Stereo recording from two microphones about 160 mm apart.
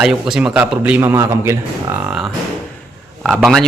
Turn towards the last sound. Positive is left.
turn(degrees=0)  # may be behind; listen again after turning